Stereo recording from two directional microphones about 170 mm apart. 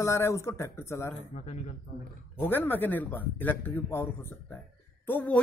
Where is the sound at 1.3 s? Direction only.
45° left (ahead or behind).